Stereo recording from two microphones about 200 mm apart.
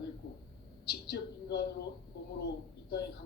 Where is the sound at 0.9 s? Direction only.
55° left (ahead or behind).